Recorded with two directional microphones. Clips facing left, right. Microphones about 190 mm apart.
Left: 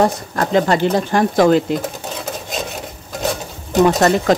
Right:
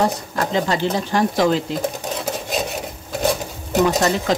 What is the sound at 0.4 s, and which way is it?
Speech, 55° left (ahead or behind).